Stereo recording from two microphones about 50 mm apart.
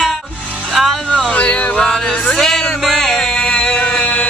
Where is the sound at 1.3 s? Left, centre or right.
Left.